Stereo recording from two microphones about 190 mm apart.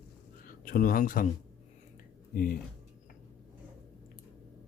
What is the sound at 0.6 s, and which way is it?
Speech, 50° left (ahead or behind).